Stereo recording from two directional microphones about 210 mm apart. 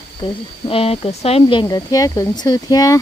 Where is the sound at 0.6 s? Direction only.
25° left (ahead or behind).